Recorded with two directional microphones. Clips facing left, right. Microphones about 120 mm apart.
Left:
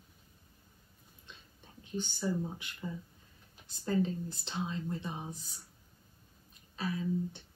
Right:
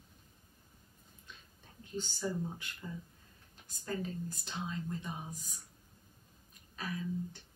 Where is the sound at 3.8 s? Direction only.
25° left (ahead or behind).